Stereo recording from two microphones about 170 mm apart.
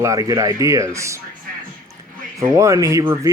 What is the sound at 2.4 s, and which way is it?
Speech, 20° right (ahead or behind).